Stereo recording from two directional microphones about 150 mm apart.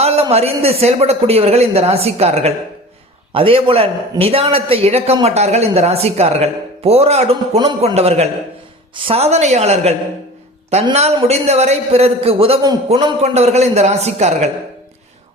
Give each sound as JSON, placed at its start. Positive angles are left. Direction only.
{"t": 0.0, "sound": "a man's voice", "side_deg": -45}
{"t": 7.9, "sound": "speech", "side_deg": -45}
{"t": 10.9, "sound": "speech", "side_deg": -45}